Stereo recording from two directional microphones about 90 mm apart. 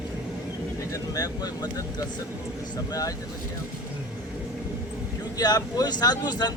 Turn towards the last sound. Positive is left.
turn(degrees=50)  # may be behind; listen again after turning